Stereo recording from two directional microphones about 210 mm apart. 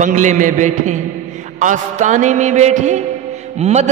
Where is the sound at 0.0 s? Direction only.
35° right (ahead or behind).